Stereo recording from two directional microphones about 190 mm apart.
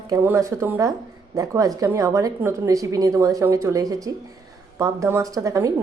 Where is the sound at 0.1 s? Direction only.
15° right (ahead or behind).